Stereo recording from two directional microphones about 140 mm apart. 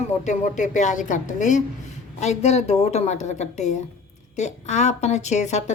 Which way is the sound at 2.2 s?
55° left (ahead or behind).